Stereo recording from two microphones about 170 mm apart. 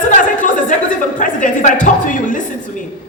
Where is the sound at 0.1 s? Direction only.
50° left (ahead or behind).